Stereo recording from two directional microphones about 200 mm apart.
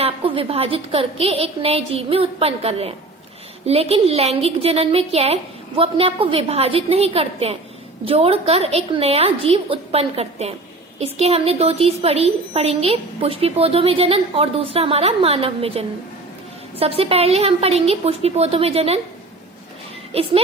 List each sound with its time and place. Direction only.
0.0 s a woman's voice: 25° right (ahead or behind)
20.1 s a woman's voice: 30° right (ahead or behind)